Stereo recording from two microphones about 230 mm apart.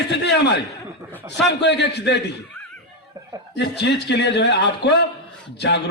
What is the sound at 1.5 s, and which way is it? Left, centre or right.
Speech, left.